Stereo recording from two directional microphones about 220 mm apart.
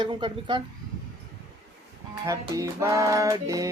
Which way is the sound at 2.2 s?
15° right (ahead or behind).